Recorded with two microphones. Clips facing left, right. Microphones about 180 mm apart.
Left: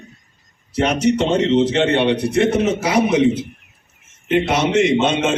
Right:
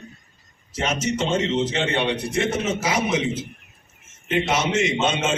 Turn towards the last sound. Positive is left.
turn(degrees=60)  # may be behind; listen again after turning